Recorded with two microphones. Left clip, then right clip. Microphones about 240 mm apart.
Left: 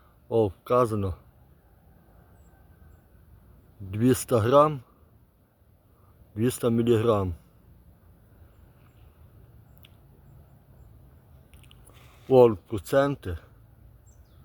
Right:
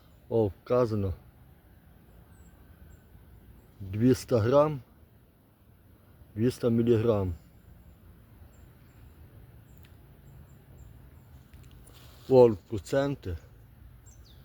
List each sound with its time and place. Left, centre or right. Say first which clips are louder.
0.3 s speech: left 3 dB; centre
3.9 s speech: left 2 dB; centre
6.3 s speech: left 2 dB; centre
12.3 s speech: left 2 dB; centre